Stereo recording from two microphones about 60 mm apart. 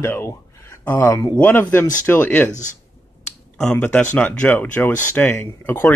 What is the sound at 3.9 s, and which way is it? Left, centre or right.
Speech, left.